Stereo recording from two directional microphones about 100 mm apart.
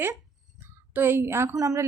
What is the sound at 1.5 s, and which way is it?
Speech, 35° right (ahead or behind).